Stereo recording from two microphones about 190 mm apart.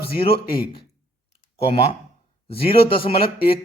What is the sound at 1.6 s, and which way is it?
Speech, 30° left (ahead or behind).